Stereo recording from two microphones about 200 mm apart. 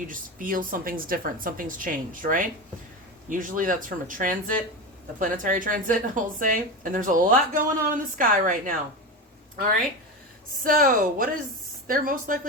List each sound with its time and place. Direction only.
0.1 s a woman's voice: 45° right (ahead or behind)
10.6 s a woman's voice: 45° right (ahead or behind)